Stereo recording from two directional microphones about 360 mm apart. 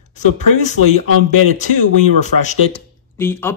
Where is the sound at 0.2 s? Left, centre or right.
Centre.